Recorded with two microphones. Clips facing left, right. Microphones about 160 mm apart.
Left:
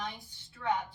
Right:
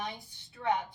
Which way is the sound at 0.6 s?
30° right (ahead or behind).